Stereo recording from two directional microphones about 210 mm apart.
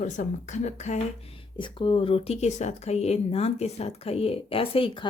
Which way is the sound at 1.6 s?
25° left (ahead or behind).